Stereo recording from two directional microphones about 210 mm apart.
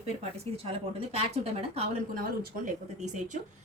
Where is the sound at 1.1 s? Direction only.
30° right (ahead or behind).